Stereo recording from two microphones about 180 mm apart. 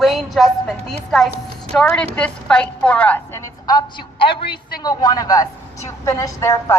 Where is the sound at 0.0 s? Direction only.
Centre (ahead or behind).